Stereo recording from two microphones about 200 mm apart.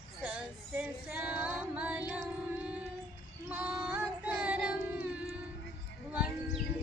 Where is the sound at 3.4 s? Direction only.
5° right (ahead or behind).